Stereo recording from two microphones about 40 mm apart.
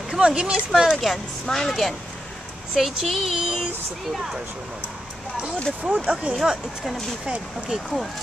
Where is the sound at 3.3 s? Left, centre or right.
Centre.